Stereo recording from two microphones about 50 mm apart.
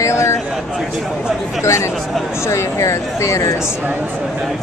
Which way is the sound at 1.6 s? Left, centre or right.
Left.